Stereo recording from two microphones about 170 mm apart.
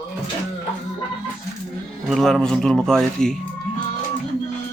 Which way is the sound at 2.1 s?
Centre (ahead or behind).